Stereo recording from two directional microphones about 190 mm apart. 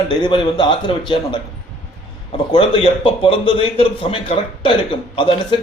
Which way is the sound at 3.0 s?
30° left (ahead or behind).